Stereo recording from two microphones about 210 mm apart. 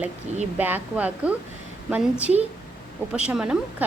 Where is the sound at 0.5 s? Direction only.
10° right (ahead or behind).